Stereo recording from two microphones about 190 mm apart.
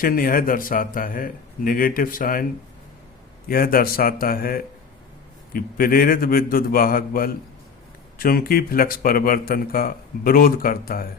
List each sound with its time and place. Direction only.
0.0 s speech: 50° left (ahead or behind)
3.5 s speech: 50° left (ahead or behind)